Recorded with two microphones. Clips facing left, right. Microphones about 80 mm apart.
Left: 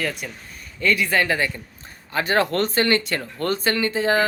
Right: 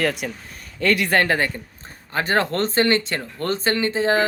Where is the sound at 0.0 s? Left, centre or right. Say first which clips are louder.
Right 5 dB; right.